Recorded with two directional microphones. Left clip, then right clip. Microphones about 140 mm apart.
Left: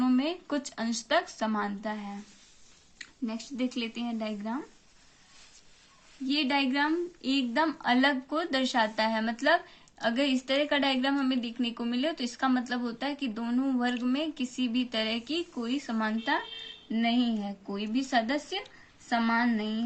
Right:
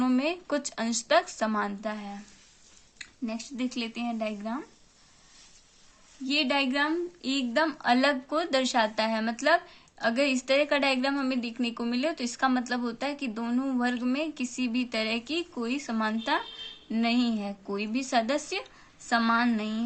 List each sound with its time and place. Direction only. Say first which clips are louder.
0.0 s a woman's voice: right 1 dB; 30° right (ahead or behind)
6.2 s a woman's voice: right 2 dB; 25° right (ahead or behind); by 19.8 s 40° right (ahead or behind)